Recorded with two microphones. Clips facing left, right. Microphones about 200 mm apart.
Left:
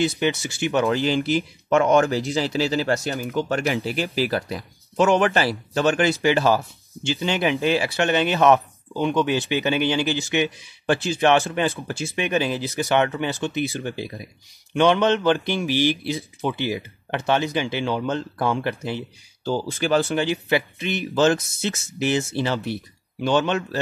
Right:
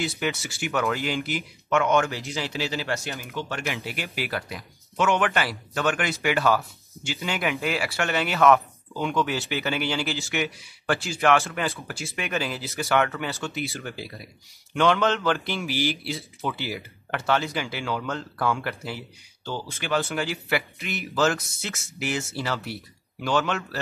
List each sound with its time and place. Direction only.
0.2 s speech: 20° left (ahead or behind)
19.4 s speech: 35° left (ahead or behind)